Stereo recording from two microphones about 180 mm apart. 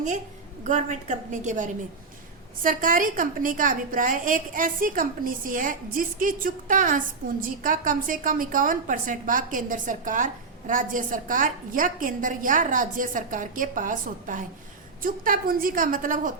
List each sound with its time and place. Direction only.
0.6 s a woman's voice: 45° right (ahead or behind)